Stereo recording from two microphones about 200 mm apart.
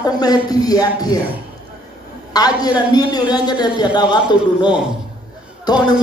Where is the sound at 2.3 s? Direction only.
20° left (ahead or behind).